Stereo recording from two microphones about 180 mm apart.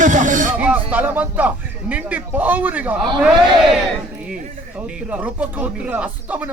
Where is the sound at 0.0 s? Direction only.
45° right (ahead or behind).